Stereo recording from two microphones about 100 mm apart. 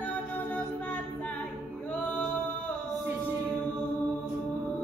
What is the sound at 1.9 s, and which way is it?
Singing, 15° left (ahead or behind).